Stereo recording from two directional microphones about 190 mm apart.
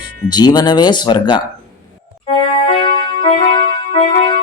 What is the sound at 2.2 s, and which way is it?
Music, 30° left (ahead or behind).